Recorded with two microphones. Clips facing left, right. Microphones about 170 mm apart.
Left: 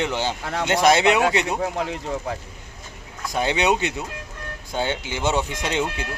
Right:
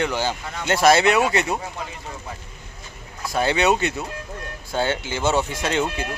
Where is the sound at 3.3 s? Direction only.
15° left (ahead or behind).